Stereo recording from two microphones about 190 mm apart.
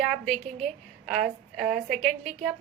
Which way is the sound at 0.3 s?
40° right (ahead or behind).